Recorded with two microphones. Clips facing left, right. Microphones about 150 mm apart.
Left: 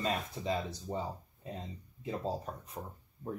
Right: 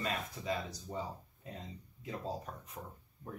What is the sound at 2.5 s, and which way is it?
Speech, 30° left (ahead or behind).